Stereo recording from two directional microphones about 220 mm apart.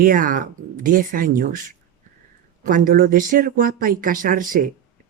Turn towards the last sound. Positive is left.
turn(degrees=-40)  # may be behind; listen again after turning